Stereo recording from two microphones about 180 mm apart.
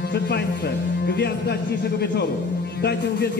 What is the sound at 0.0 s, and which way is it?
Speech, 65° left (ahead or behind).